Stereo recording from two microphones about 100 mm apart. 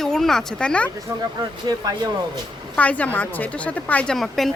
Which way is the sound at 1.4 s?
40° right (ahead or behind).